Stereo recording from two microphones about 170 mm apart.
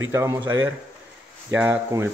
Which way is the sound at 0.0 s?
15° right (ahead or behind).